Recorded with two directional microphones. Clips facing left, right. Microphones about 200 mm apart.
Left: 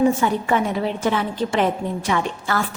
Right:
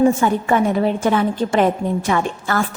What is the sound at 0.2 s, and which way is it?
A woman's voice, 50° right (ahead or behind).